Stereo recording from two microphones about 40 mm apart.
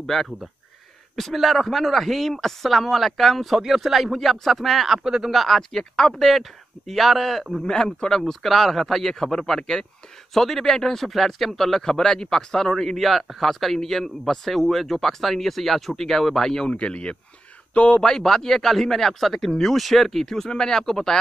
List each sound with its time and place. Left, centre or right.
0.0 s speech: centre
3.5 s speech: centre
5.0 s speech: centre
5.3 s speech: centre
5.6 s speech: centre
7.6 s speech: centre
8.3 s speech: centre
16.6 s speech: left
18.0 s speech: centre